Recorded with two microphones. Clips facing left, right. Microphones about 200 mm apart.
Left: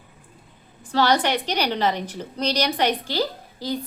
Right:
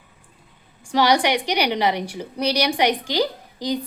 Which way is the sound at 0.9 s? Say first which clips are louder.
Right 2 dB; 15° right (ahead or behind).